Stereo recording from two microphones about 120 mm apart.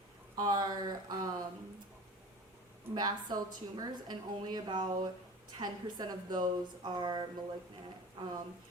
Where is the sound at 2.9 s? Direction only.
35° right (ahead or behind).